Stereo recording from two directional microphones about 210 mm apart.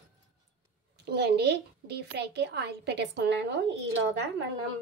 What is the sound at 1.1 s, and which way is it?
A woman's voice, 50° right (ahead or behind).